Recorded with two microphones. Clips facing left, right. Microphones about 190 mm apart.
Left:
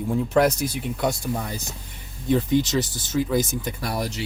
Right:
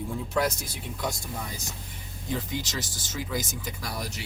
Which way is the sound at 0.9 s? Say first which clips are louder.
Left 7 dB; 65° left (ahead or behind).